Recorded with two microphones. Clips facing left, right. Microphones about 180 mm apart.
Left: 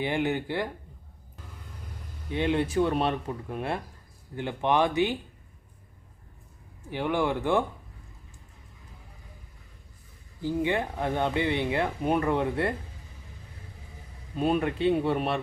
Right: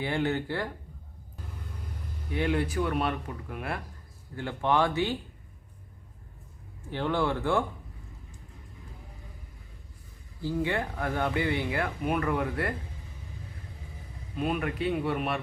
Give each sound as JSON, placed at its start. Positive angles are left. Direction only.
{"t": 0.0, "sound": "speech", "side_deg": 15}
{"t": 2.3, "sound": "speech", "side_deg": 25}
{"t": 6.9, "sound": "speech", "side_deg": 15}
{"t": 10.4, "sound": "speech", "side_deg": 20}
{"t": 14.3, "sound": "speech", "side_deg": 30}